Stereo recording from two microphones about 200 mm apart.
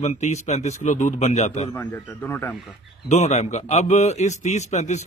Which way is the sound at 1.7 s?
10° left (ahead or behind).